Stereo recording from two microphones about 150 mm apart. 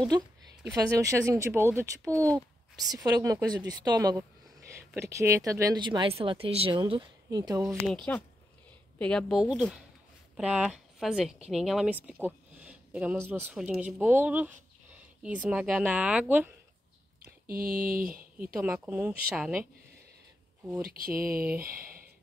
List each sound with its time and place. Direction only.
0.7 s speech: 20° right (ahead or behind)
7.8 s speech: 5° left (ahead or behind)
10.3 s a woman's voice: 5° right (ahead or behind)
17.2 s speech: 75° right (ahead or behind)
18.4 s speech: 10° right (ahead or behind)
20.8 s speech: 80° right
21.6 s music: 70° right (ahead or behind)